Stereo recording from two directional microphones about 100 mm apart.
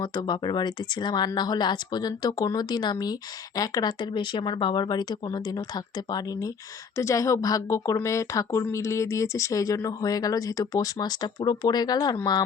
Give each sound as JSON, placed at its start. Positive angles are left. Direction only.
{"t": 0.0, "sound": "speech", "side_deg": 45}
{"t": 6.9, "sound": "speech", "side_deg": 30}